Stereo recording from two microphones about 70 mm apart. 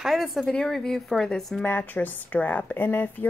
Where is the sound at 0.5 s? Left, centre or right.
Centre.